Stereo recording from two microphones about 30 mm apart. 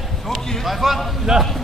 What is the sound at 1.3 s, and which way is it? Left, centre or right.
Speech, centre.